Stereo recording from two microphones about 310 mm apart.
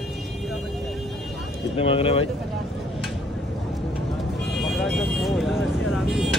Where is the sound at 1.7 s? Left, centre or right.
Centre.